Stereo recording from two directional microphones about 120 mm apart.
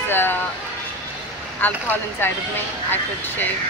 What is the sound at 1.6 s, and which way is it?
Speech, 15° left (ahead or behind).